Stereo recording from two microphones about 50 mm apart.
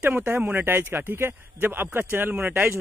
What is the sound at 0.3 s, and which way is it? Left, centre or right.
Speech, right.